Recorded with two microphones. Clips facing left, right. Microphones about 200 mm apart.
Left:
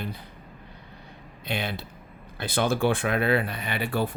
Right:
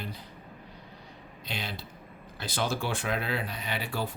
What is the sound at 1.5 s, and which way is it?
Speech, 60° left (ahead or behind).